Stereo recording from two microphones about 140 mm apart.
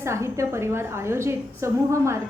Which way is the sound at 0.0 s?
20° right (ahead or behind).